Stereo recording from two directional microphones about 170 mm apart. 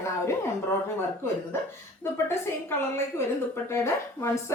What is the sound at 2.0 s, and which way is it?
Speech, 15° left (ahead or behind).